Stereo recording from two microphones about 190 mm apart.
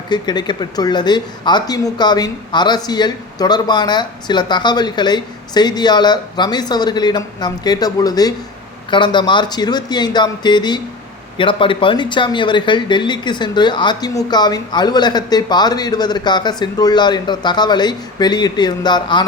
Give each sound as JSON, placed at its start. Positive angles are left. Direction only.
{"t": 0.1, "sound": "speech", "side_deg": 20}